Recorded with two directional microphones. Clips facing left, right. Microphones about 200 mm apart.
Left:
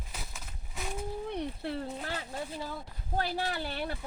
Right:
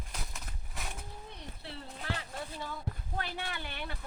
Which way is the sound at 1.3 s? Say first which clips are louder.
Left 12 dB; 60° left (ahead or behind).